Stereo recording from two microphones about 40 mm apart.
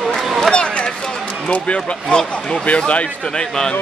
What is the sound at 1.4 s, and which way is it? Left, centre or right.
Speech, left.